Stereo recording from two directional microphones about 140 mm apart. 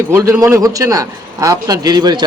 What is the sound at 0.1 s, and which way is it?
A man's voice, 20° right (ahead or behind).